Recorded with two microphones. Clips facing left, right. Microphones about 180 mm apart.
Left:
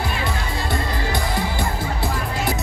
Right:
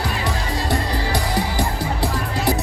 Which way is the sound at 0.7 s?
35° right (ahead or behind).